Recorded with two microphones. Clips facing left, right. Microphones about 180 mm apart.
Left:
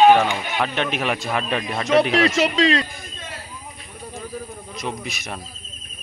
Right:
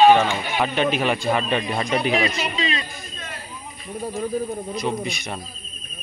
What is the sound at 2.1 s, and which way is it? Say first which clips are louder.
Speech: left 5 dB; 85° left.